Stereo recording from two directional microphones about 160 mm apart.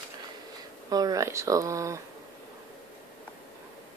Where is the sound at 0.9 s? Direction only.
20° right (ahead or behind).